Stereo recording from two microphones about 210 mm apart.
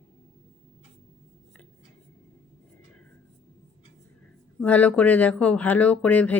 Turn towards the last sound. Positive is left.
turn(degrees=5)  # may be behind; listen again after turning